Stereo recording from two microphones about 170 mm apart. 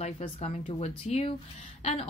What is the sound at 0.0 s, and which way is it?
Speech, 35° left (ahead or behind).